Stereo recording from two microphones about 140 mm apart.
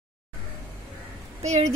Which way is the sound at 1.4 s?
55° right (ahead or behind).